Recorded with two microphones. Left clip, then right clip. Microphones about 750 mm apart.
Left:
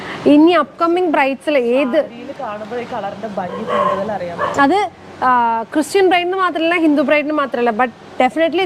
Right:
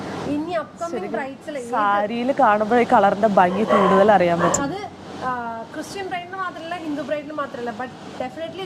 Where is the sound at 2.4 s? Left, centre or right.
Right.